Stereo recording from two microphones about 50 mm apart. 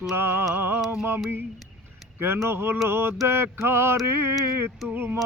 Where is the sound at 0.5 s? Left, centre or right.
Right.